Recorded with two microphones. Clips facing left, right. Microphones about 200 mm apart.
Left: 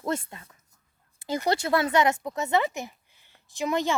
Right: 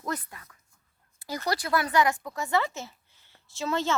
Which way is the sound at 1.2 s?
20° left (ahead or behind).